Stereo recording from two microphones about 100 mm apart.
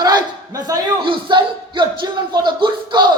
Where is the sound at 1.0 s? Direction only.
55° right (ahead or behind).